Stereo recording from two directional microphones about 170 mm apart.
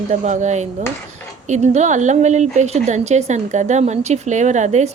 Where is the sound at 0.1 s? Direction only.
45° right (ahead or behind).